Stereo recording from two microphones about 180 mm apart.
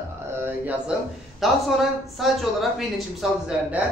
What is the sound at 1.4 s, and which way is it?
A man's voice, centre (ahead or behind).